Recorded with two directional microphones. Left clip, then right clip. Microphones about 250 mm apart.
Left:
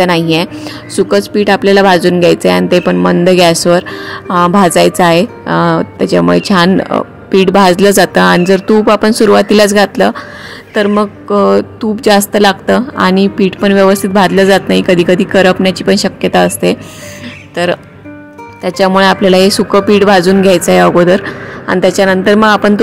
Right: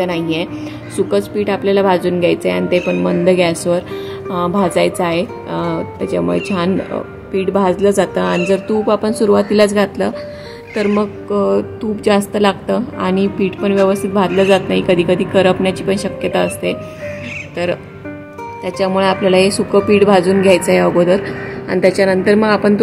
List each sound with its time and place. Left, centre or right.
0.0 s speech: left